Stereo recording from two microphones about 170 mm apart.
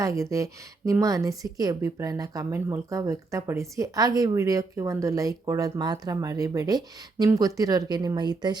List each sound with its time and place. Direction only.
0.0 s a woman's voice: 20° right (ahead or behind)